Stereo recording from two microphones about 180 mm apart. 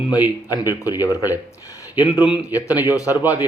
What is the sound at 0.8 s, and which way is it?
A man's voice, 20° left (ahead or behind).